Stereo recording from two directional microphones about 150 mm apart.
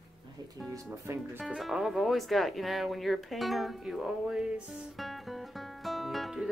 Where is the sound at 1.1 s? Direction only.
20° right (ahead or behind).